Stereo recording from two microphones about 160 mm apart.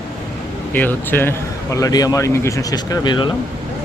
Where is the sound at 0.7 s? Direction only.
10° left (ahead or behind); by 3.4 s 30° left (ahead or behind).